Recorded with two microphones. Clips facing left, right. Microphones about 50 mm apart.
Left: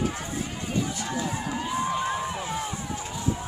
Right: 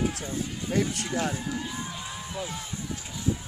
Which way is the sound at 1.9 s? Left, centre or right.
Left.